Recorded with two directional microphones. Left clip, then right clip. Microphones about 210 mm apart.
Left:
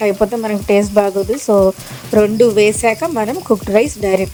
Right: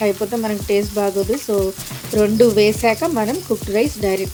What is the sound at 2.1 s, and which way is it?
Speech, 35° left (ahead or behind).